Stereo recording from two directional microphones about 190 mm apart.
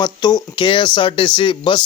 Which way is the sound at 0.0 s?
20° left (ahead or behind).